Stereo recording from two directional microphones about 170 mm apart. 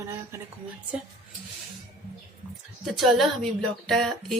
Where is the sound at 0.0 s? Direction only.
15° right (ahead or behind).